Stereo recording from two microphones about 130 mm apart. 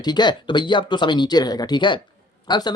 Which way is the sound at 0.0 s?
35° left (ahead or behind).